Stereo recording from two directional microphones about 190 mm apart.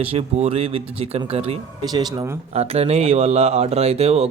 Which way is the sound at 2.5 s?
35° right (ahead or behind).